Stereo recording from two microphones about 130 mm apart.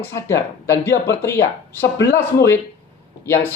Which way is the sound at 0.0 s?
20° left (ahead or behind).